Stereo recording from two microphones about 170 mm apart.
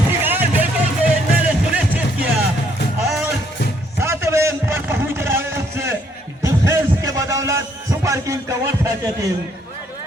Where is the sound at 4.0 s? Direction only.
15° right (ahead or behind).